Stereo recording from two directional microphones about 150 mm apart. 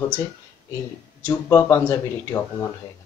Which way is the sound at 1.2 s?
20° left (ahead or behind).